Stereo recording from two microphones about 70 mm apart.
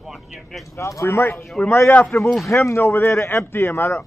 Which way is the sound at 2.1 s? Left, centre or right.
Centre.